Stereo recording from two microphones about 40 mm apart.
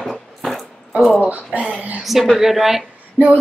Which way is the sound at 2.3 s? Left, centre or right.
Centre.